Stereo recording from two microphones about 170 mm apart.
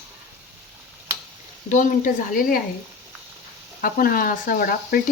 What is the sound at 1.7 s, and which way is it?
Speech, 50° left (ahead or behind).